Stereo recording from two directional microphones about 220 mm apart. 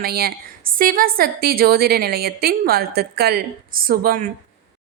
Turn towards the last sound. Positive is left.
turn(degrees=-40)  # may be behind; listen again after turning